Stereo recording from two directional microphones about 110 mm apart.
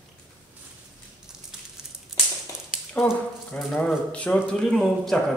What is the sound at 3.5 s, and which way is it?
Speech, 10° left (ahead or behind).